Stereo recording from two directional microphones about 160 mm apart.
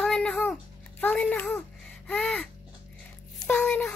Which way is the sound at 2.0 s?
5° left (ahead or behind).